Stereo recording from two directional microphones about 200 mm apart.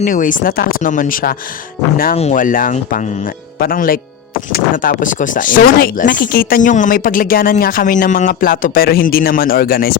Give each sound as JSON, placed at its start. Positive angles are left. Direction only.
{"t": 0.0, "sound": "speech", "side_deg": 40}